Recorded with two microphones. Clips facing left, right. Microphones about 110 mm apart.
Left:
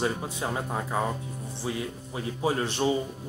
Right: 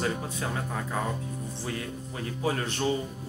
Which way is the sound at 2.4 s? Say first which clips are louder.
Left 3 dB; 20° left (ahead or behind).